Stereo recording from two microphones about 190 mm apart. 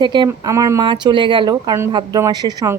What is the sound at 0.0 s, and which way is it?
Speech, 25° right (ahead or behind).